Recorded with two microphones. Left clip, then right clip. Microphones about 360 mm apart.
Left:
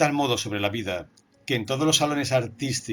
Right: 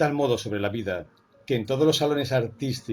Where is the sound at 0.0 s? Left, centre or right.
Centre.